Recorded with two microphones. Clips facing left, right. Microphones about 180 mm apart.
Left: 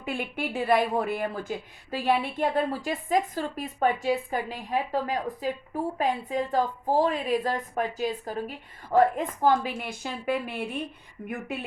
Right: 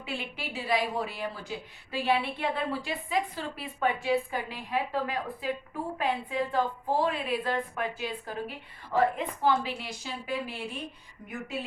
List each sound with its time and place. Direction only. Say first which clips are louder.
0.0 s a woman's voice: left 6 dB; 50° left (ahead or behind)